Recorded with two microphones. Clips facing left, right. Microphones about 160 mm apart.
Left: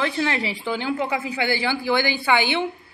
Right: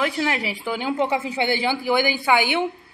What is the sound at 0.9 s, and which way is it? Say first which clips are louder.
A woman's voice: right 5 dB; 25° right (ahead or behind).